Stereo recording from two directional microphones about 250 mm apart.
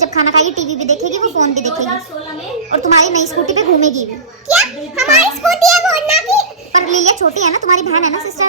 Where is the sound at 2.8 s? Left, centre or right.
Right.